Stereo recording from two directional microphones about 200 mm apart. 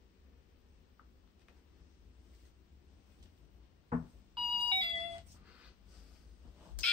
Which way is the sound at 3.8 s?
25° right (ahead or behind).